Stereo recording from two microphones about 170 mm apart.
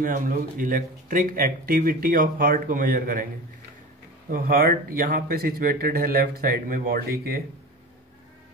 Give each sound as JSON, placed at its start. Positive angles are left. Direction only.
{"t": 0.0, "sound": "speech", "side_deg": -55}
{"t": 4.3, "sound": "speech", "side_deg": -55}